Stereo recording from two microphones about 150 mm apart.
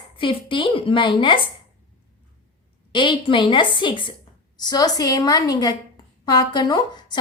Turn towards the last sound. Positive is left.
turn(degrees=30)  # may be behind; listen again after turning